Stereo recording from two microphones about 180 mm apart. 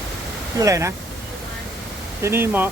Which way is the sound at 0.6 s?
15° right (ahead or behind).